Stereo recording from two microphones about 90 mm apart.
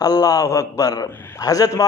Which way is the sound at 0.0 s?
45° left (ahead or behind).